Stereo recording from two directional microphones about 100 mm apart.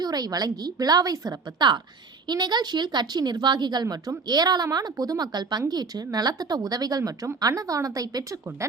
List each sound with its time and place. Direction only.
0.0 s a woman's voice: 40° right (ahead or behind)